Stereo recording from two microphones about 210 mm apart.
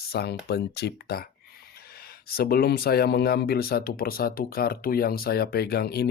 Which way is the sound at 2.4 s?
45° left (ahead or behind).